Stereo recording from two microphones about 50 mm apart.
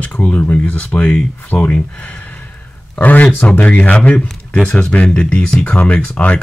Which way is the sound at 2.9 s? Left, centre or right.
Left.